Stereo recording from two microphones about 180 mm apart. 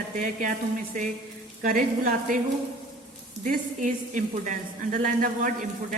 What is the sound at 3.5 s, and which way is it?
A woman's voice, 45° right (ahead or behind).